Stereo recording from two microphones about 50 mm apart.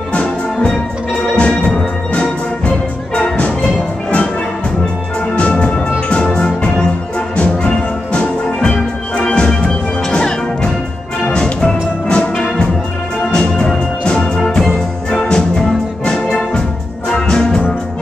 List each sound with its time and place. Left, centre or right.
0.1 s music: centre
3.2 s music: left
5.3 s music: left